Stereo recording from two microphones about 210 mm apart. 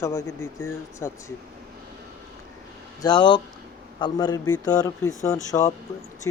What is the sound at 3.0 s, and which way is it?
Speech, 20° left (ahead or behind).